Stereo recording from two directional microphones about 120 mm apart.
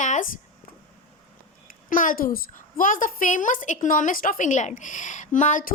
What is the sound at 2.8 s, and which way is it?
A woman's voice, 90° left.